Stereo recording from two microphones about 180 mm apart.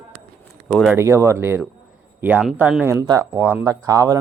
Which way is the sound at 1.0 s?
15° right (ahead or behind).